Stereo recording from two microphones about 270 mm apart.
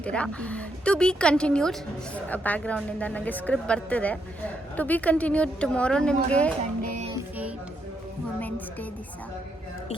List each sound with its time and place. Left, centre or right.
0.0 s a woman's voice: centre
6.8 s music: right
7.1 s music: centre
8.4 s a sound: centre